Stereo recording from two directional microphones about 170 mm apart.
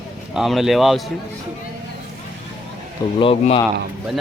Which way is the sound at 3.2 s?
35° left (ahead or behind).